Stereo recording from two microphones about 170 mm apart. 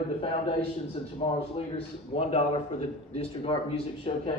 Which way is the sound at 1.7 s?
35° left (ahead or behind).